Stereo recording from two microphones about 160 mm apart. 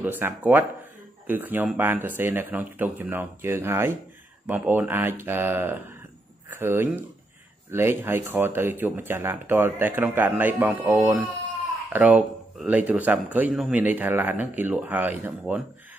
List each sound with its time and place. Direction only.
0.0 s a man's voice: 10° right (ahead or behind)